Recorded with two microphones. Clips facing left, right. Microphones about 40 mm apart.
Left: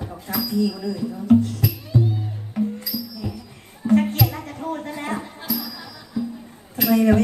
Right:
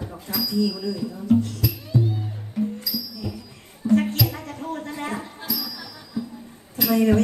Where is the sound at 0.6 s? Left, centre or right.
Left.